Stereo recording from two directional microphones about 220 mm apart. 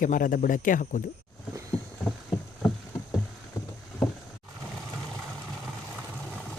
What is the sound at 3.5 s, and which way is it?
Vehicle, 15° left (ahead or behind).